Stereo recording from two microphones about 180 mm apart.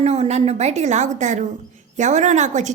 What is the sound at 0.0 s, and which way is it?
A woman's voice, 35° right (ahead or behind).